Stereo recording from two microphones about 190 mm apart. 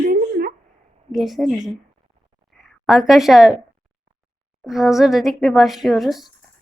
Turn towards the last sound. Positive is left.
turn(degrees=0)  # may be behind; listen again after turning